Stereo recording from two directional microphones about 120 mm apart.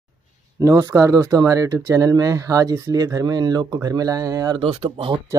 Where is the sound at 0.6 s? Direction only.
30° right (ahead or behind).